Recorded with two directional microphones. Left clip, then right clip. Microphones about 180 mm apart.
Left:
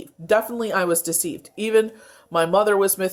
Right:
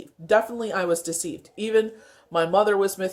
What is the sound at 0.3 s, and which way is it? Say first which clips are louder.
Speech: left 1 dB; 30° left (ahead or behind).